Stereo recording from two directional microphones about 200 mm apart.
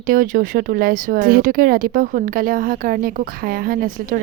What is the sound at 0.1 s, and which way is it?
Speech, 45° right (ahead or behind).